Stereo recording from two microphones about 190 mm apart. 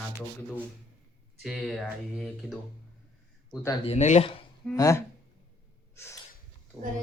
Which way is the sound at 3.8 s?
35° left (ahead or behind).